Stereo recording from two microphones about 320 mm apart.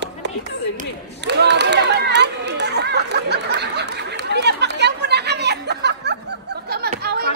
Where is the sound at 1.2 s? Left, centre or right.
Right.